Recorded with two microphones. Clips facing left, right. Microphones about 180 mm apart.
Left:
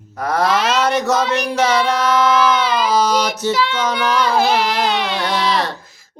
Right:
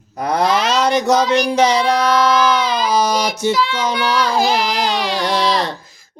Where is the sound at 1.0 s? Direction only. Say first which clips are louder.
Right 3 dB; 15° right (ahead or behind).